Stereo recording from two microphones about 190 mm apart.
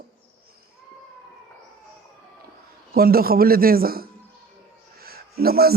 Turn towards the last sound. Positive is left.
turn(degrees=-55)  # may be behind; listen again after turning